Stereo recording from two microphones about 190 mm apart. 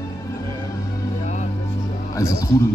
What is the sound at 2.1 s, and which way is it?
Speech, 15° left (ahead or behind).